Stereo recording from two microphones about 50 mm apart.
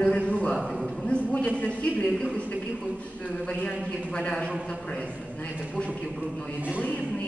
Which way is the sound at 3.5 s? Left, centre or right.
Left.